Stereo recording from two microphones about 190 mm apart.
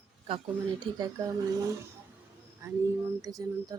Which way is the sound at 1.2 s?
15° right (ahead or behind).